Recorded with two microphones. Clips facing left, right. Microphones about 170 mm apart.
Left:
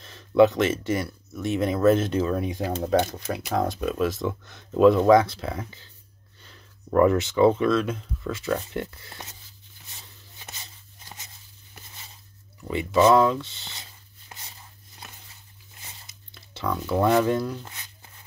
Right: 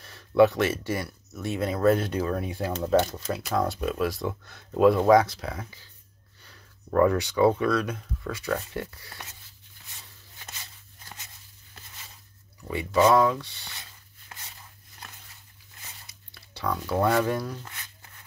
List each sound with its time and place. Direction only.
0.0 s speech: 20° left (ahead or behind)
12.6 s speech: 25° left (ahead or behind)
15.8 s a sound: 25° left (ahead or behind)